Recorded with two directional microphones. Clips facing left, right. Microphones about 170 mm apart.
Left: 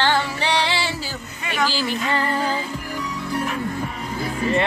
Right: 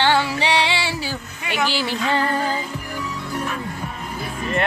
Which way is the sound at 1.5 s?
20° right (ahead or behind).